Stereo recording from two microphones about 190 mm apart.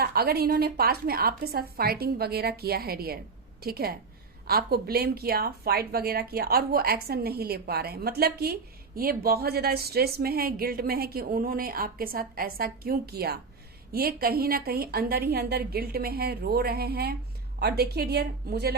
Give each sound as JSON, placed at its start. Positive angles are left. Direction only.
{"t": 0.0, "sound": "a woman's voice", "side_deg": -55}